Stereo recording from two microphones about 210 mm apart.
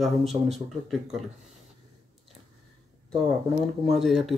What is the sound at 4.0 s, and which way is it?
Speech, centre (ahead or behind).